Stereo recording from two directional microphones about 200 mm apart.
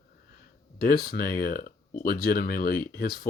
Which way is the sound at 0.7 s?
50° left (ahead or behind).